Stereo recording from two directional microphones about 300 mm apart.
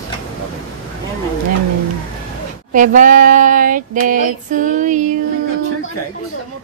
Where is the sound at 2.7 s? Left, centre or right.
Right.